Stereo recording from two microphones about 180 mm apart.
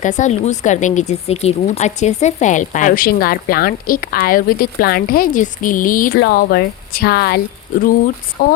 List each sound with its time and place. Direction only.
0.0 s speech: 45° left (ahead or behind)
6.1 s speech: 65° left (ahead or behind)